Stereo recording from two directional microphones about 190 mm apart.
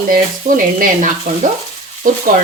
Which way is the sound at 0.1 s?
45° right (ahead or behind).